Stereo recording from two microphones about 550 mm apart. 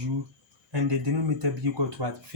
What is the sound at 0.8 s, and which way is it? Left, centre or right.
Speech, right.